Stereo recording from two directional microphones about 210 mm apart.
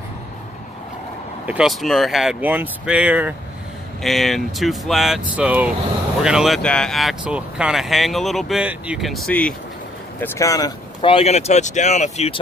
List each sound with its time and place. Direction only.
1.4 s speech: 5° right (ahead or behind); by 12.4 s 30° left (ahead or behind)